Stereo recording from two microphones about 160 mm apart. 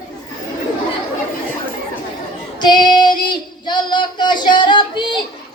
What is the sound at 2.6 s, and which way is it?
Child singing, 30° left (ahead or behind).